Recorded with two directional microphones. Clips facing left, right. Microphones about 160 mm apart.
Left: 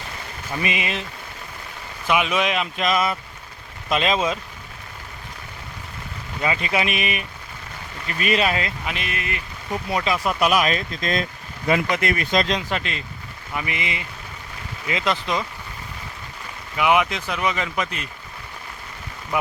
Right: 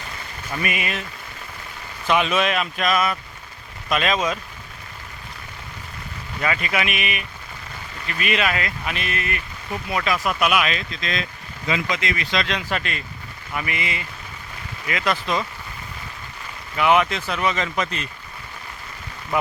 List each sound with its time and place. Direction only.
0.5 s speech: 20° left (ahead or behind)
2.0 s speech: 10° left (ahead or behind)
6.4 s speech: 25° left (ahead or behind)
12.6 s speech: 20° left (ahead or behind)
16.7 s speech: 10° left (ahead or behind)